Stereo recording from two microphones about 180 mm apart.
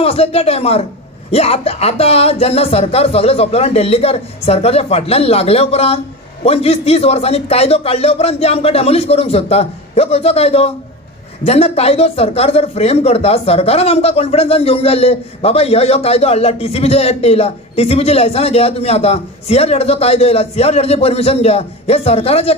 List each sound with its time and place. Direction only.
0.0 s speech: 35° left (ahead or behind)